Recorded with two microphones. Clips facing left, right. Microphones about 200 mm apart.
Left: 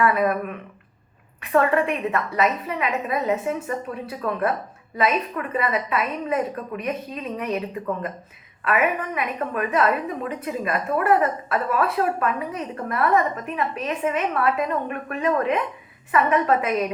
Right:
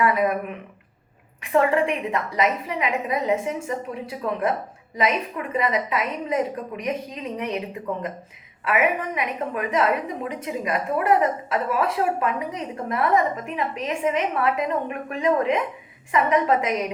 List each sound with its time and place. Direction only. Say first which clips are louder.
0.0 s a woman's voice: left 1 dB; 15° right (ahead or behind)